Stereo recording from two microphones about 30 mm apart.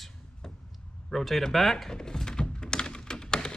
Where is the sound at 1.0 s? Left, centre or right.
Centre.